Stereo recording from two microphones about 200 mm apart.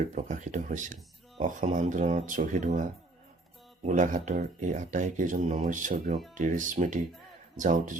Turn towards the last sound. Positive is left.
turn(degrees=-40)  # may be behind; listen again after turning